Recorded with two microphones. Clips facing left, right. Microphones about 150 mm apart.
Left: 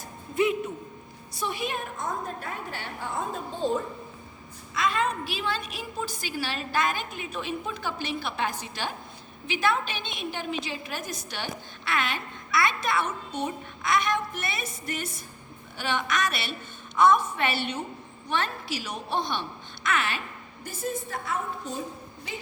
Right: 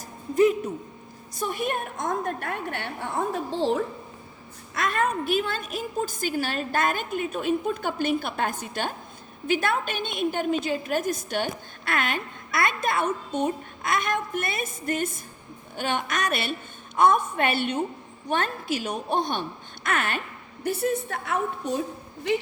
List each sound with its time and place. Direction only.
1.4 s a woman's voice: 50° right (ahead or behind)
2.0 s a woman's voice: 75° right (ahead or behind)
4.7 s a woman's voice: 60° right (ahead or behind)
20.7 s a woman's voice: 70° right (ahead or behind)